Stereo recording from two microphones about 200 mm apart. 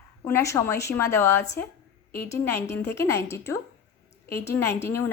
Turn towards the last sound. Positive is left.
turn(degrees=10)  # may be behind; listen again after turning